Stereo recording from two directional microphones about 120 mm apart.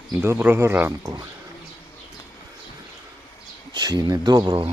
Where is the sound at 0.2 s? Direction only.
15° right (ahead or behind).